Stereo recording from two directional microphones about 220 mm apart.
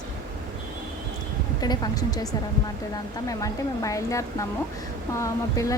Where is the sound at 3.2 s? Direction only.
15° left (ahead or behind).